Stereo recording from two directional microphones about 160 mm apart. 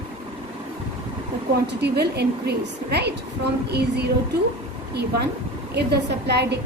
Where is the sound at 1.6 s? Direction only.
90° right.